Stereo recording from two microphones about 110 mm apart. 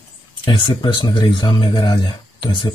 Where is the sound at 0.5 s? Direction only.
50° left (ahead or behind).